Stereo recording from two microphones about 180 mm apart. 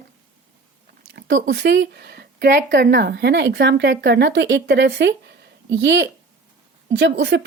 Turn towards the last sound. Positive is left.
turn(degrees=-75)  # may be behind; listen again after turning